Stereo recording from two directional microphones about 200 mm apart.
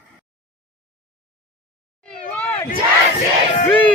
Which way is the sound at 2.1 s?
5° left (ahead or behind).